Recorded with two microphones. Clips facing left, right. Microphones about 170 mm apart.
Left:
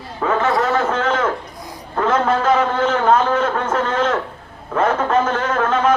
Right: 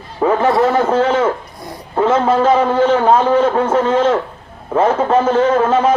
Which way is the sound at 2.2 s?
30° right (ahead or behind).